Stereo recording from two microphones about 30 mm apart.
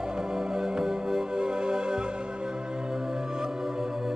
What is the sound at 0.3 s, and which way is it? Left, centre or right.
Music, centre.